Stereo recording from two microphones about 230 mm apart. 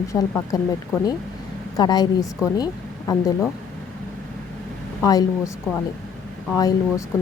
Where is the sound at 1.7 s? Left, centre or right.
Centre.